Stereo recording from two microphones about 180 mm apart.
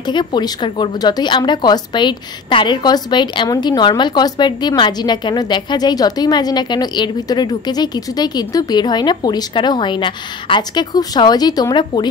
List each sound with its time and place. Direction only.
0.0 s a woman's voice: 25° left (ahead or behind)